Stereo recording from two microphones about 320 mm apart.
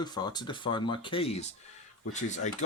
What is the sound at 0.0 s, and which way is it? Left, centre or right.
Speech, centre.